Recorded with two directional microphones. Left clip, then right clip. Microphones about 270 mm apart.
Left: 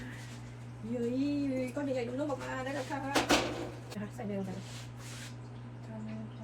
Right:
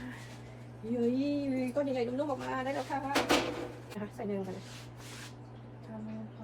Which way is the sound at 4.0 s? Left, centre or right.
Right.